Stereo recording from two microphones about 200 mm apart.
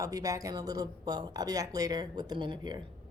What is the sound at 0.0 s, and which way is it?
Speech, 15° right (ahead or behind).